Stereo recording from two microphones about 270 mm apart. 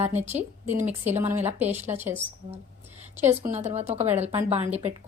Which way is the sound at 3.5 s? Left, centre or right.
Right.